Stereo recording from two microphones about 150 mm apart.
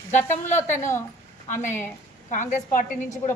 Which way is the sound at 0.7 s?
15° left (ahead or behind).